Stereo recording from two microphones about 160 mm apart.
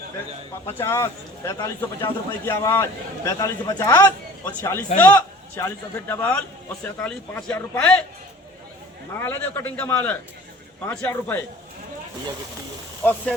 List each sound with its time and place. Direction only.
0.7 s speech: 15° left (ahead or behind)
9.2 s speech: 15° left (ahead or behind)
13.0 s speech: 10° left (ahead or behind)